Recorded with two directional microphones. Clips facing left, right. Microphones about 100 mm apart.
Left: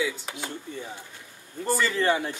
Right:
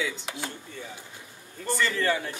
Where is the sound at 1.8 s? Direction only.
20° left (ahead or behind).